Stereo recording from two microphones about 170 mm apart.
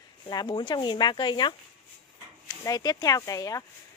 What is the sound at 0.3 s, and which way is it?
Speech, 25° left (ahead or behind).